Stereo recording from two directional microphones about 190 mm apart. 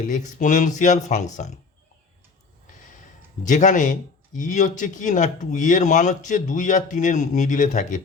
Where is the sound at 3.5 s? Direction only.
40° left (ahead or behind).